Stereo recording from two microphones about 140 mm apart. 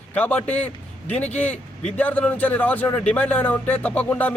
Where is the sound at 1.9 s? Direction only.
10° left (ahead or behind).